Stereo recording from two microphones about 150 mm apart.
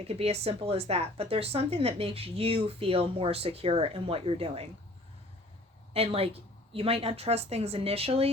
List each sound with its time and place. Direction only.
0.0 s speech: 45° right (ahead or behind)
5.9 s speech: 40° right (ahead or behind)